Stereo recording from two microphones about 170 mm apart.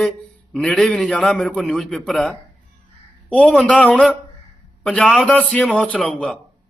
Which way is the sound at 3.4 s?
5° left (ahead or behind).